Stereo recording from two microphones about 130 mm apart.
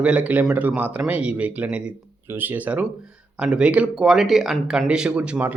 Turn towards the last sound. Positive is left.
turn(degrees=-10)  # may be behind; listen again after turning